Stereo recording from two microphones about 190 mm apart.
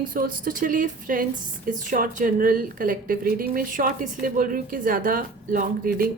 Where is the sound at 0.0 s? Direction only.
45° right (ahead or behind).